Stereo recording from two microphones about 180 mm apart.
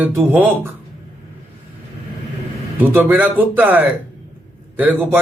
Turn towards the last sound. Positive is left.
turn(degrees=-10)  # may be behind; listen again after turning